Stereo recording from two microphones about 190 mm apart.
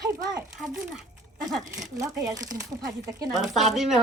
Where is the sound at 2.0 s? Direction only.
15° right (ahead or behind).